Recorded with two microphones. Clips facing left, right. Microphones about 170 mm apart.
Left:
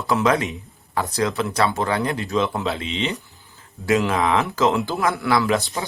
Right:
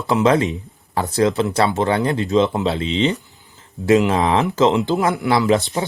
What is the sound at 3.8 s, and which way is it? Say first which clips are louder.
Speech: right 4 dB; 25° right (ahead or behind).